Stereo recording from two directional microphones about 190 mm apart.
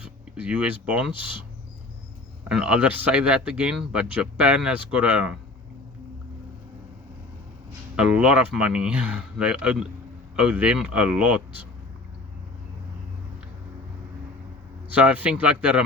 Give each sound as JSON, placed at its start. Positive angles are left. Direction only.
{"t": 0.0, "sound": "speech", "side_deg": -5}
{"t": 1.1, "sound": "speech", "side_deg": 25}
{"t": 2.5, "sound": "speech", "side_deg": -5}
{"t": 7.9, "sound": "speech", "side_deg": -5}
{"t": 14.9, "sound": "speech", "side_deg": -10}